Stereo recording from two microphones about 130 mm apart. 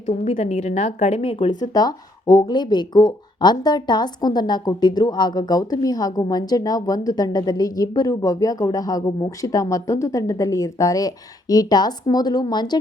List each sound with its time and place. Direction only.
0.1 s a woman's voice: 60° left (ahead or behind)
1.7 s speech: 30° left (ahead or behind)